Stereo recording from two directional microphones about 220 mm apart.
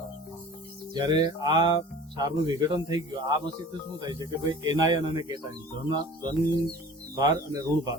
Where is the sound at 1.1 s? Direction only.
20° right (ahead or behind).